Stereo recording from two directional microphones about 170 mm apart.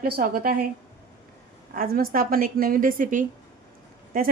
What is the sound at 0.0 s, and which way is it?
Speech, 55° right (ahead or behind).